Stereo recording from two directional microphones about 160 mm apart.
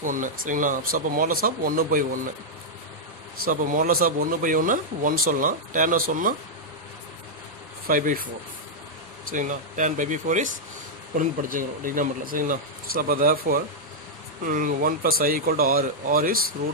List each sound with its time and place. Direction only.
0.0 s speech: 55° right (ahead or behind)
3.4 s speech: 60° right (ahead or behind)
7.9 s speech: 60° right (ahead or behind)
9.3 s speech: 55° right (ahead or behind)